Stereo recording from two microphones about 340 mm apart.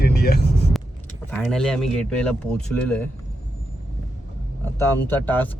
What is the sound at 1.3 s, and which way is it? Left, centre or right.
Speech, centre.